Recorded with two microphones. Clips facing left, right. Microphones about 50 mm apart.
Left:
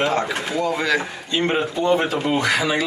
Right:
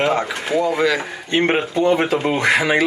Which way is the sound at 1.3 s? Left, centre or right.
Right.